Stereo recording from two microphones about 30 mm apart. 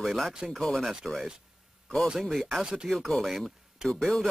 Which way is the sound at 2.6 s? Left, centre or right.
Right.